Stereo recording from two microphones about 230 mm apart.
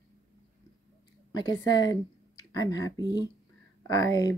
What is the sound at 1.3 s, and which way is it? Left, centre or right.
Speech, centre.